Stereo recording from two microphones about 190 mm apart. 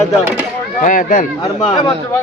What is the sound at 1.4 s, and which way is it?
Speech, 20° left (ahead or behind).